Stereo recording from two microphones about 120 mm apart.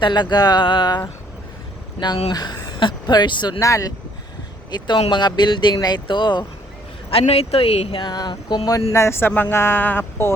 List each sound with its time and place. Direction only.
0.0 s speech: 40° left (ahead or behind)
2.3 s speech: 35° left (ahead or behind)
3.6 s speech: 25° left (ahead or behind)
4.9 s speech: 45° left (ahead or behind)
7.1 s speech: 55° left (ahead or behind); by 8.8 s 35° left (ahead or behind)
8.9 s speech: 20° left (ahead or behind)